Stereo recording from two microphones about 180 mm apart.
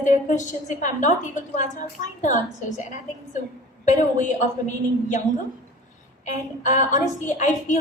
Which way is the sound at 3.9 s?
45° left (ahead or behind).